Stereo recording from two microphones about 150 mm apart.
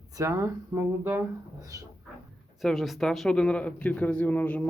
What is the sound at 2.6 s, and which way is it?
Speech, centre (ahead or behind).